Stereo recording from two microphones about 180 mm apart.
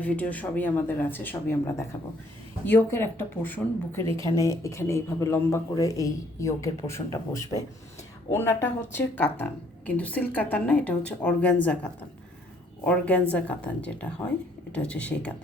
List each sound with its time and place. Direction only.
0.0 s speech: 10° left (ahead or behind)